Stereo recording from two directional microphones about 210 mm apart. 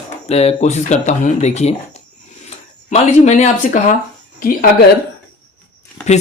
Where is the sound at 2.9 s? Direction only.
30° left (ahead or behind).